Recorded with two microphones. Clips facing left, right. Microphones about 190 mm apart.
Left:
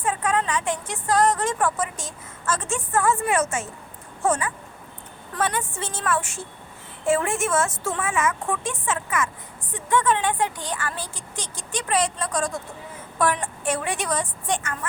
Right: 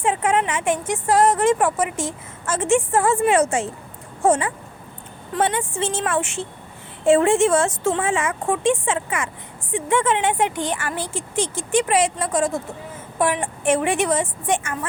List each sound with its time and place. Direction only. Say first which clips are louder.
0.0 s a woman's voice: right 4 dB; 25° right (ahead or behind)